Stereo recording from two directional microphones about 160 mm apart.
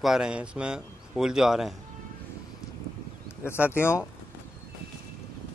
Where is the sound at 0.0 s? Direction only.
5° right (ahead or behind).